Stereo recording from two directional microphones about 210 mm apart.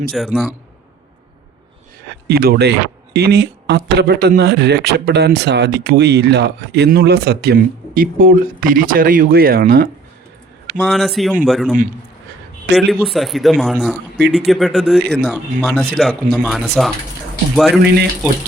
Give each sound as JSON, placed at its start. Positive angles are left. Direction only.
{"t": 0.1, "sound": "speech", "side_deg": 0}
{"t": 2.2, "sound": "speech", "side_deg": -50}
{"t": 10.8, "sound": "speech", "side_deg": 0}
{"t": 12.9, "sound": "speech", "side_deg": 0}